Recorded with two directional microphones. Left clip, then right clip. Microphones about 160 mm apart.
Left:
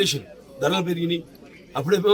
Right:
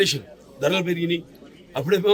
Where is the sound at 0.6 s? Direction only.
30° right (ahead or behind).